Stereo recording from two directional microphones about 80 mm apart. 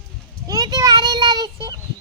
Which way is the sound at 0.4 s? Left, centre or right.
Right.